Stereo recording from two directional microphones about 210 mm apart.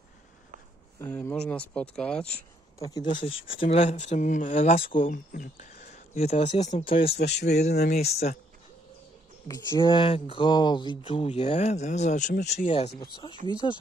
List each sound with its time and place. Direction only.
0.9 s speech: 10° left (ahead or behind)
2.8 s speech: 20° left (ahead or behind)
7.7 s speech: 50° left (ahead or behind)
8.0 s speech: 30° left (ahead or behind)
9.8 s speech: 25° left (ahead or behind)